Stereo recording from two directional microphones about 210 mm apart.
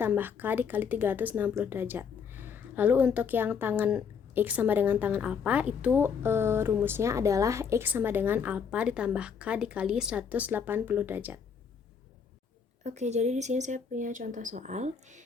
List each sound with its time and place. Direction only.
0.0 s speech: 10° right (ahead or behind)
12.8 s speech: 35° right (ahead or behind)